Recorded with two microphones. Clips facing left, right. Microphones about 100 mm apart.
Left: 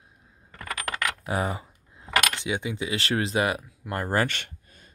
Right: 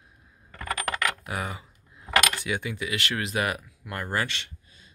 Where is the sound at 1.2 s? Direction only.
30° left (ahead or behind).